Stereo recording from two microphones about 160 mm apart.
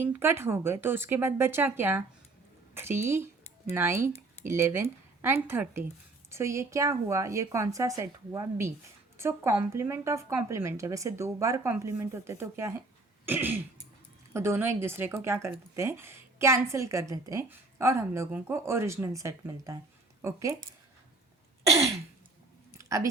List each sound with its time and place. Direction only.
0.0 s a woman's voice: 15° right (ahead or behind)
22.8 s chewing: 20° right (ahead or behind)